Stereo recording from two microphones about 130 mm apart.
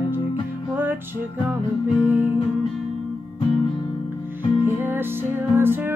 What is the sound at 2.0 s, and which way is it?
Music, 15° right (ahead or behind).